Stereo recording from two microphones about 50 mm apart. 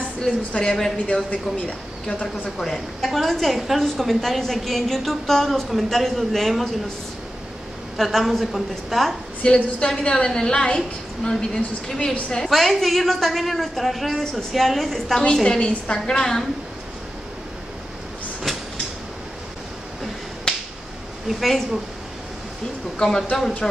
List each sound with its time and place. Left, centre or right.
0.6 s a woman's voice: centre
2.0 s a woman's voice: left
2.6 s a woman's voice: centre
8.0 s a woman's voice: centre
9.4 s a woman's voice: left
12.4 s a woman's voice: centre
21.3 s a woman's voice: centre
23.0 s a woman's voice: centre